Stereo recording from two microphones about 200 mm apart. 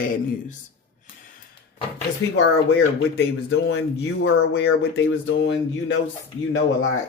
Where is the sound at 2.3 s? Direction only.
90° left.